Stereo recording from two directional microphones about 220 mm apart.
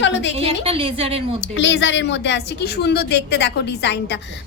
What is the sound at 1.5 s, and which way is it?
A woman's voice, 55° left (ahead or behind).